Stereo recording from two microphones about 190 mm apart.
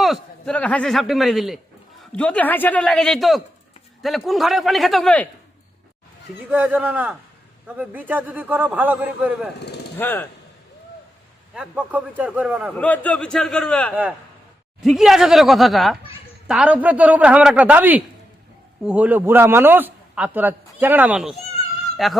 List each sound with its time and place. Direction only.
0.0 s a man's voice: centre (ahead or behind)
6.5 s a man's voice: 10° right (ahead or behind)
9.6 s speech: 60° left (ahead or behind)
10.0 s speech: 10° left (ahead or behind)
11.5 s a man's voice: 5° right (ahead or behind)
12.7 s a man's voice: 10° left (ahead or behind)